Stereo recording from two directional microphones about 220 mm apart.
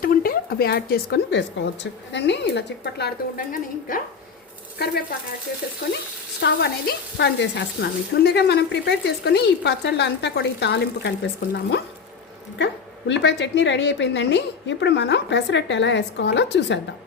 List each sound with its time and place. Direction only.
0.0 s frying: 40° left (ahead or behind)
6.4 s frying: 50° left (ahead or behind)